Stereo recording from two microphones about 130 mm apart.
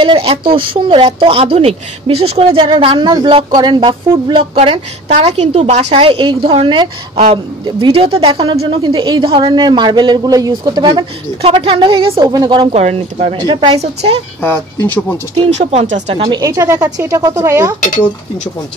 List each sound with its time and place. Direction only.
0.0 s speech: 45° right (ahead or behind)
5.1 s a woman's voice: 60° right (ahead or behind); by 10.9 s 30° right (ahead or behind)
10.9 s speech: 45° right (ahead or behind)
12.2 s a woman's voice: 30° right (ahead or behind)
12.7 s speech: 55° right (ahead or behind)
13.4 s a woman's voice: 35° right (ahead or behind)
14.4 s speech: 15° left (ahead or behind)
15.5 s speech: 55° right (ahead or behind)
16.3 s speech: 25° right (ahead or behind)
17.8 s speech: 80° left